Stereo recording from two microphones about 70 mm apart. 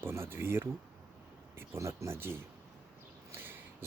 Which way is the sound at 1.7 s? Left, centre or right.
Right.